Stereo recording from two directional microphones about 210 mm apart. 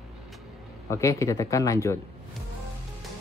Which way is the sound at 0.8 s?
15° left (ahead or behind).